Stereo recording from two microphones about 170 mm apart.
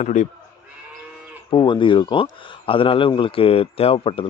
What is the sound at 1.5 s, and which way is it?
Speech, 30° left (ahead or behind).